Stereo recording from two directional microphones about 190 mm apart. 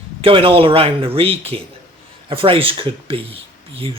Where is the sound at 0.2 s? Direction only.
30° right (ahead or behind).